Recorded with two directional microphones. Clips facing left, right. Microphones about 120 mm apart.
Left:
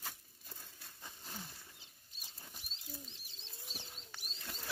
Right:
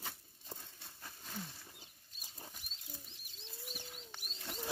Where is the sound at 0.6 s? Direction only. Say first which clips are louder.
Right 1 dB; centre (ahead or behind).